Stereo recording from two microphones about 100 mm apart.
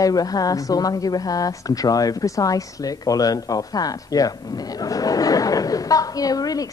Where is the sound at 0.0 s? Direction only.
40° left (ahead or behind).